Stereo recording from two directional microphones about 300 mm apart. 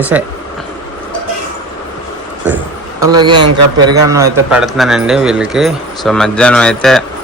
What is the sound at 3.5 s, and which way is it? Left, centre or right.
Speech, right.